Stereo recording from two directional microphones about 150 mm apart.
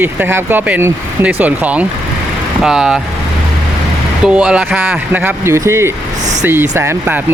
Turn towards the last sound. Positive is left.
turn(degrees=-15)  # may be behind; listen again after turning